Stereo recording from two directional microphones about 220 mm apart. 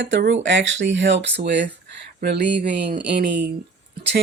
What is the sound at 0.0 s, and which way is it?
Speech, 50° right (ahead or behind).